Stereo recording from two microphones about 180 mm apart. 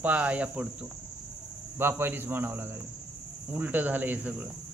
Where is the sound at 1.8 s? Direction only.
10° right (ahead or behind).